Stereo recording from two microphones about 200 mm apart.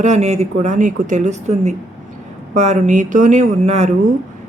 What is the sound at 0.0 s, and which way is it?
Speech, 35° right (ahead or behind).